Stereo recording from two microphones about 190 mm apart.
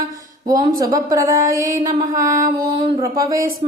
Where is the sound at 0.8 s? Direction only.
20° right (ahead or behind).